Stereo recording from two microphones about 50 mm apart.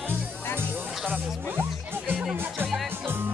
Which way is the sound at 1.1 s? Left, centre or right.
Right.